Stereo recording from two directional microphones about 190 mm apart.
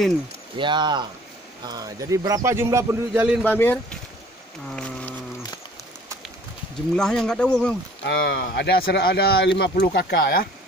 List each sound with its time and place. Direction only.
0.6 s a man's voice: 25° right (ahead or behind)
3.3 s speech: 10° left (ahead or behind)
4.6 s a sound: 5° left (ahead or behind)
7.0 s speech: 5° left (ahead or behind)
8.0 s speech: 55° left (ahead or behind)